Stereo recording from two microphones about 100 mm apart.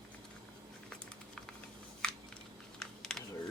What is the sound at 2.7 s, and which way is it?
Typing, 5° left (ahead or behind).